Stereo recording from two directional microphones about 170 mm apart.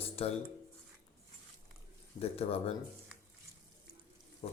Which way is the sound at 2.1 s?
35° left (ahead or behind).